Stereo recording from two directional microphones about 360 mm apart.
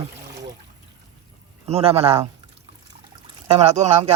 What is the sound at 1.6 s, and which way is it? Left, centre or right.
Speech, centre.